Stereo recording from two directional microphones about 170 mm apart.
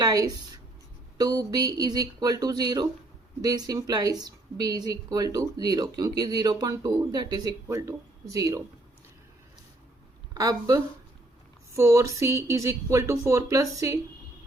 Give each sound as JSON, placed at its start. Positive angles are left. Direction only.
{"t": 0.0, "sound": "speech", "side_deg": -25}
{"t": 10.3, "sound": "speech", "side_deg": -20}